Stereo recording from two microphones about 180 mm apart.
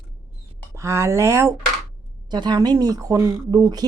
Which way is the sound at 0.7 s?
15° right (ahead or behind).